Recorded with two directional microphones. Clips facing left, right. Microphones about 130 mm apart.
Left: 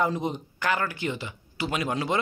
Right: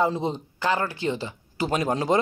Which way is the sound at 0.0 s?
25° right (ahead or behind).